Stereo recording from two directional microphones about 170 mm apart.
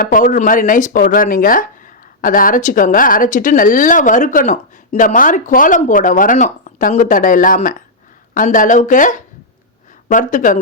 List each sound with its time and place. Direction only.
0.0 s speech: 50° left (ahead or behind)